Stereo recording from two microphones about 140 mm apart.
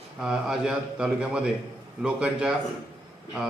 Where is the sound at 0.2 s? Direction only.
5° right (ahead or behind).